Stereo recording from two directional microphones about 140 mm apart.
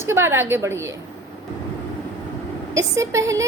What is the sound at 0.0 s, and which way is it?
Speech, 15° right (ahead or behind).